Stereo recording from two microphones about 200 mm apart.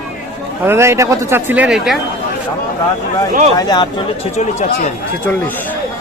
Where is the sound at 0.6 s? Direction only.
10° right (ahead or behind).